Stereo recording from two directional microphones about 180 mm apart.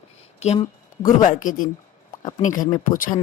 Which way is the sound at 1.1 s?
45° left (ahead or behind).